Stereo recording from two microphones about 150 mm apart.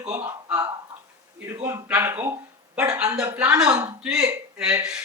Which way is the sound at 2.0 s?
15° right (ahead or behind).